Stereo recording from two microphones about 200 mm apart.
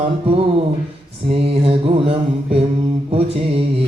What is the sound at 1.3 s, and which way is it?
Mantra, 30° right (ahead or behind).